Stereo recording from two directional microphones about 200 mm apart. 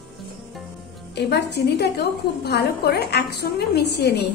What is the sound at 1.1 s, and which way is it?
A woman's voice, 55° left (ahead or behind).